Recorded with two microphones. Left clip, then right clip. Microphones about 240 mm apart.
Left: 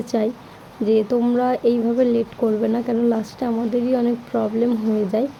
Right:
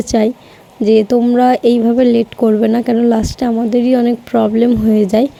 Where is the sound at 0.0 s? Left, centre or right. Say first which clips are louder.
Right 8 dB; right.